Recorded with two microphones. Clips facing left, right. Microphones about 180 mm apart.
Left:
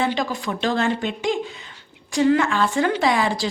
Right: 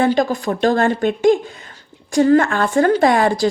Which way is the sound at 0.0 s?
45° right (ahead or behind).